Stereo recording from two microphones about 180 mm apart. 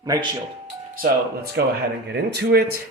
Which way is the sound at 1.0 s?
60° right (ahead or behind).